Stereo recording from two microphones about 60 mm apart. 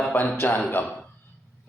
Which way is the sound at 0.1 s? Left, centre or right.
Left.